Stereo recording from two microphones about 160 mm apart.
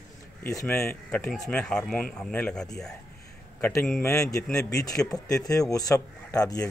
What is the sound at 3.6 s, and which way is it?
A man's voice, 15° left (ahead or behind).